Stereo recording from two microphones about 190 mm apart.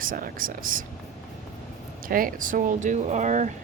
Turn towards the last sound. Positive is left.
turn(degrees=-40)  # may be behind; listen again after turning